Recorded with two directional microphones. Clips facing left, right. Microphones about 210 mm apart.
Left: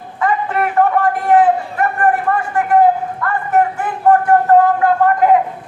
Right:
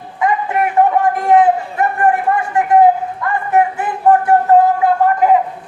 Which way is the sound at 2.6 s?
15° right (ahead or behind).